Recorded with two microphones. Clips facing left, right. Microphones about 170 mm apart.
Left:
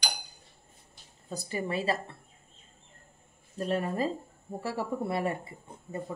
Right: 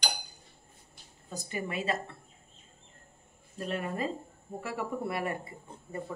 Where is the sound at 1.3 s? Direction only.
30° left (ahead or behind).